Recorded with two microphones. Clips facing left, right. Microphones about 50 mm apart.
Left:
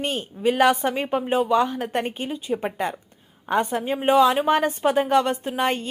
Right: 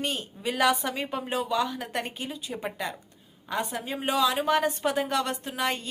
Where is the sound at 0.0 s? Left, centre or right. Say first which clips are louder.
Left 7 dB; left.